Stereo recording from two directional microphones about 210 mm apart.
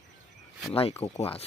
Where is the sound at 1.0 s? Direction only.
30° left (ahead or behind).